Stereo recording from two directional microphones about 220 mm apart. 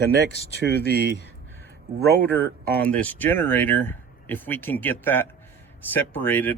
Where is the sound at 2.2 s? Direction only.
10° left (ahead or behind).